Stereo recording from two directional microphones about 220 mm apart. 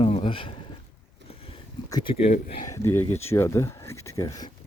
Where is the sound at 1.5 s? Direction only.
25° left (ahead or behind).